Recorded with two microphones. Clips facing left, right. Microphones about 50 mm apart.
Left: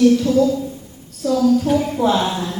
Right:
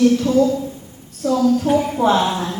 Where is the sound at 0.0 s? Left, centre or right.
Right; by 2.0 s centre.